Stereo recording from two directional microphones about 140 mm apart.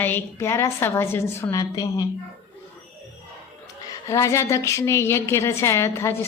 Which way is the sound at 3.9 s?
20° left (ahead or behind).